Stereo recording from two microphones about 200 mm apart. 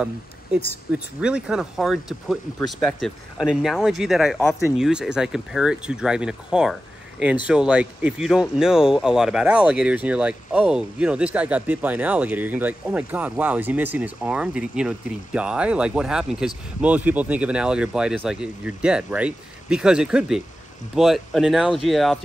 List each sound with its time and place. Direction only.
0.9 s speech: 5° right (ahead or behind)